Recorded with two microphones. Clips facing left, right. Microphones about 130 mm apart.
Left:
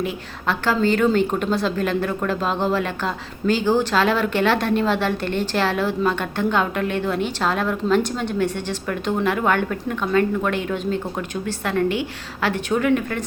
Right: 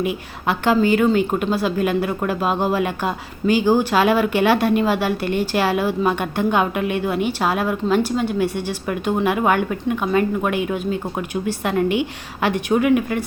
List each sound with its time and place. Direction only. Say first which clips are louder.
0.0 s a woman's voice: right 3 dB; 15° right (ahead or behind)